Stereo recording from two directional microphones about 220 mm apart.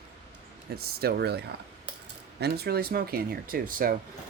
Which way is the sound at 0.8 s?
45° right (ahead or behind).